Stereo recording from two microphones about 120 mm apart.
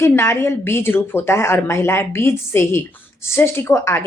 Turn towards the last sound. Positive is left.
turn(degrees=20)  # may be behind; listen again after turning